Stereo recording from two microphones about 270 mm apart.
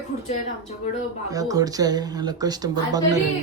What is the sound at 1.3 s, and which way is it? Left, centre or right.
Speech, centre.